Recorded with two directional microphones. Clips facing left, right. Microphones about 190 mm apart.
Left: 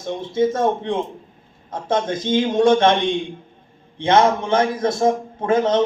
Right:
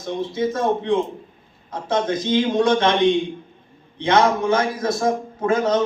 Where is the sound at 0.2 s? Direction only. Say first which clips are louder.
Left 4 dB; 25° left (ahead or behind).